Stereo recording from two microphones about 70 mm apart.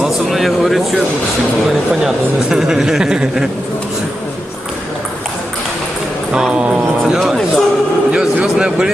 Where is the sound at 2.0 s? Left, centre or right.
Centre.